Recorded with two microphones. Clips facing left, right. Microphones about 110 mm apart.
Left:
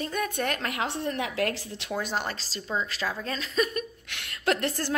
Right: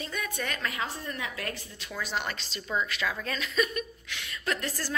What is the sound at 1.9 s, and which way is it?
Speech, 45° left (ahead or behind).